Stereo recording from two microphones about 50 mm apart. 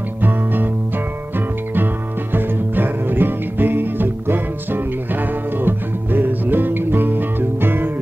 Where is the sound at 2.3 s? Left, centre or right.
Right.